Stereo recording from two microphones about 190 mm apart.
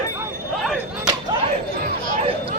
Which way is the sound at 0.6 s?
Centre (ahead or behind).